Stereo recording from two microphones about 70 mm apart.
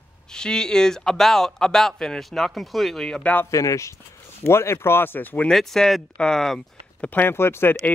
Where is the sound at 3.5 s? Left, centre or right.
Left.